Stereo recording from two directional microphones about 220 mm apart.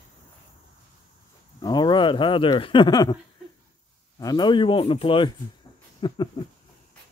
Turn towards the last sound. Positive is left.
turn(degrees=20)  # may be behind; listen again after turning